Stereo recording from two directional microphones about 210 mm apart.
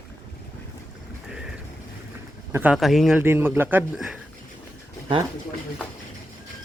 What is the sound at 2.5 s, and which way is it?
A man's voice, 5° right (ahead or behind).